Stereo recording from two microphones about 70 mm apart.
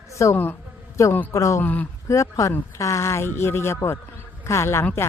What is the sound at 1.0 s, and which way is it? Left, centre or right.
Speech, left.